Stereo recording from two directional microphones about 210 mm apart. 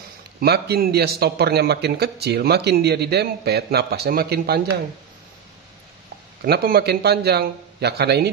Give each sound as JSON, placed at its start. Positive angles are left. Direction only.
{"t": 0.4, "sound": "a man's voice", "side_deg": -45}
{"t": 6.4, "sound": "a man's voice", "side_deg": -45}